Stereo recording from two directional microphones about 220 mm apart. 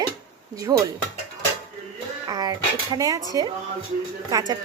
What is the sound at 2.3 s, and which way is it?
Speech, 15° right (ahead or behind).